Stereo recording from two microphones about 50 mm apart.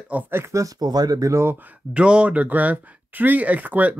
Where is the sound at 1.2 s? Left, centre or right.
Right.